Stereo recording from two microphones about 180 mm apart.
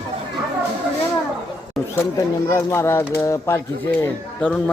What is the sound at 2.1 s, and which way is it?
A man's voice, 15° left (ahead or behind).